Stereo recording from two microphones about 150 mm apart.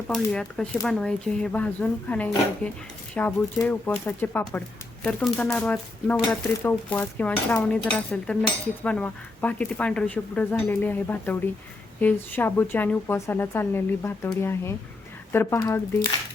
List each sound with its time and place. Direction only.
0.1 s speech: 5° left (ahead or behind)
0.9 s dishes: 5° left (ahead or behind)